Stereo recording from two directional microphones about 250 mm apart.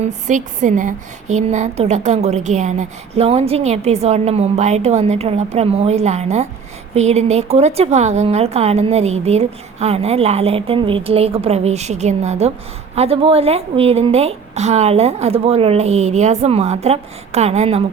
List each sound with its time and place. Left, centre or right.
0.0 s speech: right